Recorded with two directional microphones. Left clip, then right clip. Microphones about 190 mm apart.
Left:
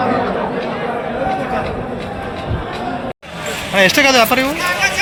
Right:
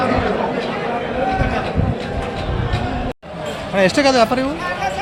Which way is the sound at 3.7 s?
Centre (ahead or behind).